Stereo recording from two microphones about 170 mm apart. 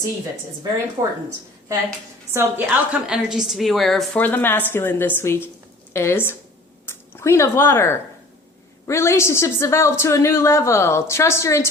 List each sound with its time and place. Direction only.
2.3 s a woman's voice: 10° right (ahead or behind); by 11.7 s 15° left (ahead or behind)